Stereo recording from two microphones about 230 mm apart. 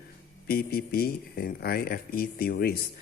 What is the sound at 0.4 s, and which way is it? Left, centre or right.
Speech, left.